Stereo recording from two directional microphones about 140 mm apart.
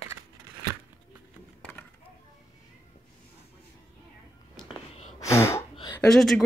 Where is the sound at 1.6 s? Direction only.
10° left (ahead or behind).